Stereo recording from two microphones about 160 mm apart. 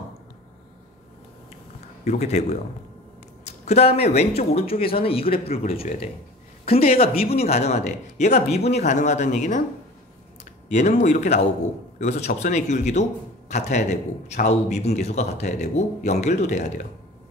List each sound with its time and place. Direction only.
2.0 s a man's voice: 45° left (ahead or behind)
10.7 s a man's voice: 50° left (ahead or behind)